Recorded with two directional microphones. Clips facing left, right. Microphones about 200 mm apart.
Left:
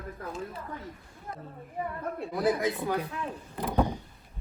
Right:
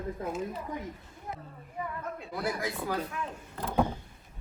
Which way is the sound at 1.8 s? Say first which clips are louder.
Left 4 dB; 40° left (ahead or behind).